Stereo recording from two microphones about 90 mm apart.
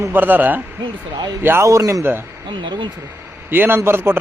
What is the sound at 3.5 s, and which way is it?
Speech, 25° right (ahead or behind).